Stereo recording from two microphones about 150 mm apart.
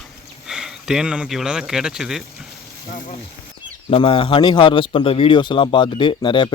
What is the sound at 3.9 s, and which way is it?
Speech, 35° left (ahead or behind).